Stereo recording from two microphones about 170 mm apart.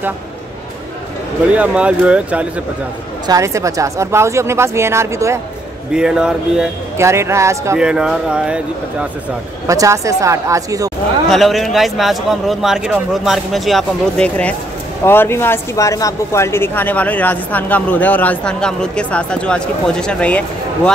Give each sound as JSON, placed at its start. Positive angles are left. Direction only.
{"t": 1.5, "sound": "speech", "side_deg": -5}
{"t": 3.3, "sound": "speech", "side_deg": -20}
{"t": 5.9, "sound": "a man's voice", "side_deg": -5}
{"t": 7.0, "sound": "speech", "side_deg": -15}
{"t": 7.8, "sound": "a man's voice", "side_deg": -5}
{"t": 9.7, "sound": "speech", "side_deg": -20}
{"t": 11.2, "sound": "a man's voice", "side_deg": 0}